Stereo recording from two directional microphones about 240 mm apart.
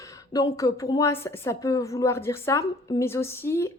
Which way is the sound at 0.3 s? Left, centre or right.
Centre.